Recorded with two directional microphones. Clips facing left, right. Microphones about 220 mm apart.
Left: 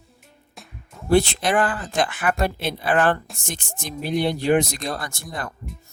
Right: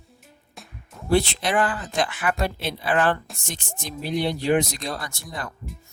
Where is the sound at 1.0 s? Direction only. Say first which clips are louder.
Left 3 dB; 45° left (ahead or behind).